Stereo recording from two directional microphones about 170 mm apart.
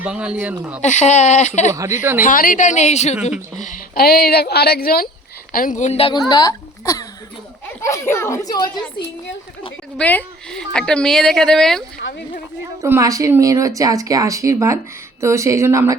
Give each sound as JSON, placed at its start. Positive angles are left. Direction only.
{"t": 0.0, "sound": "speech", "side_deg": -5}
{"t": 0.8, "sound": "a woman's voice", "side_deg": 45}
{"t": 1.7, "sound": "speech", "side_deg": -15}
{"t": 2.2, "sound": "a woman's voice", "side_deg": 55}
{"t": 3.6, "sound": "speech", "side_deg": 55}
{"t": 5.5, "sound": "a woman's voice", "side_deg": 50}
{"t": 9.0, "sound": "a woman's voice", "side_deg": 70}
{"t": 10.0, "sound": "a woman's voice", "side_deg": 10}
{"t": 12.8, "sound": "speech", "side_deg": -15}